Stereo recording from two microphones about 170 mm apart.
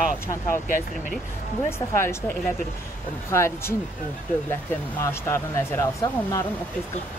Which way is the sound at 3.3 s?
15° left (ahead or behind).